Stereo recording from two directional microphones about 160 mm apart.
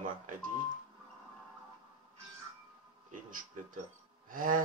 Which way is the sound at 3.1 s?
55° right (ahead or behind).